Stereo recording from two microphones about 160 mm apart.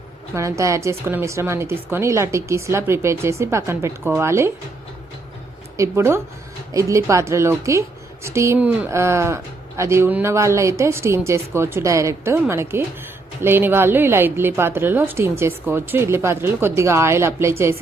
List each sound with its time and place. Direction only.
0.3 s a woman's voice: 20° right (ahead or behind)
5.7 s a woman's voice: 20° right (ahead or behind)